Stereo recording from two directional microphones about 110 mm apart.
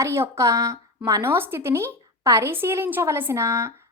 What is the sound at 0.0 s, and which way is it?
A woman's voice, 25° right (ahead or behind).